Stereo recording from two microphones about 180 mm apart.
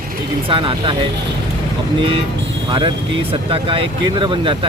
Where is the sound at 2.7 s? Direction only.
25° right (ahead or behind).